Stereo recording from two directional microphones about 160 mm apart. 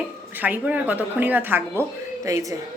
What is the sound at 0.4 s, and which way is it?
Speech, 10° right (ahead or behind).